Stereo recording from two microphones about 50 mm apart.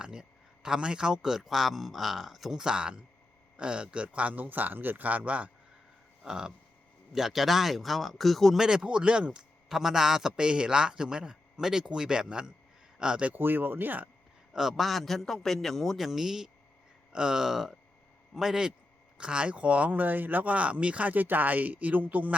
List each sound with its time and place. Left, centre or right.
0.0 s speech: centre
4.4 s speech: right
6.2 s a man's voice: centre
8.5 s speech: centre
9.6 s speech: centre
13.3 s speech: right
14.5 s a man's voice: centre; by 22.4 s right